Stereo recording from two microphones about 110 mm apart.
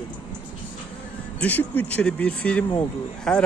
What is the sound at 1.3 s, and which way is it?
A man's voice, 15° left (ahead or behind).